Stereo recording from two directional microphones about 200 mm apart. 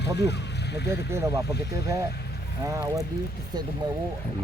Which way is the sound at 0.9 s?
15° right (ahead or behind).